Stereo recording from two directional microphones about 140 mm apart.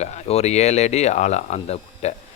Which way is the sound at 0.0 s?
50° left (ahead or behind).